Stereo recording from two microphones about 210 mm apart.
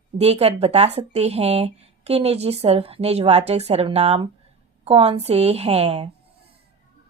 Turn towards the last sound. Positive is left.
turn(degrees=-30)  # may be behind; listen again after turning